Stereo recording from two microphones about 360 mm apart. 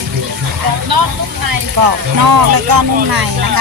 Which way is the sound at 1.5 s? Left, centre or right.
Right.